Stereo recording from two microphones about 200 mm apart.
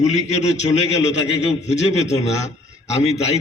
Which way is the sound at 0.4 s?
35° left (ahead or behind).